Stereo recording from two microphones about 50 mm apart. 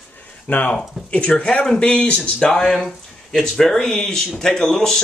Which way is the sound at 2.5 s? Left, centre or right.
Centre.